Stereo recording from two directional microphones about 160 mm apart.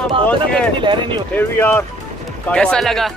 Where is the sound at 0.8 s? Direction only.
30° right (ahead or behind).